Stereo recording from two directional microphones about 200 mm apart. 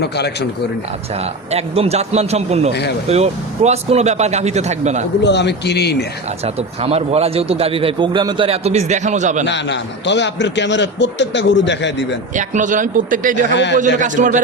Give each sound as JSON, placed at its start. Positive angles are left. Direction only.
{"t": 1.5, "sound": "speech", "side_deg": -30}
{"t": 5.2, "sound": "a man's voice", "side_deg": 60}
{"t": 6.4, "sound": "a man's voice", "side_deg": -30}
{"t": 9.5, "sound": "a man's voice", "side_deg": 60}
{"t": 12.4, "sound": "speech", "side_deg": -40}
{"t": 13.5, "sound": "a man's voice", "side_deg": 60}
{"t": 13.7, "sound": "speech", "side_deg": -40}